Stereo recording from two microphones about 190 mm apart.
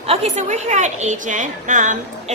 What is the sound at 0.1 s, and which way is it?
A woman's voice, 35° right (ahead or behind).